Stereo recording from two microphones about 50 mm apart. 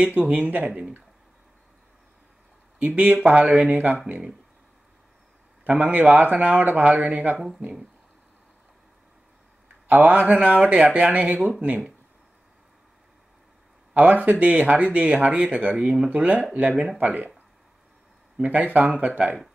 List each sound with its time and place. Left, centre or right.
0.3 s speech: right
2.8 s speech: right
5.6 s speech: right
7.3 s speech: centre
9.8 s speech: right
13.9 s speech: right
18.4 s speech: right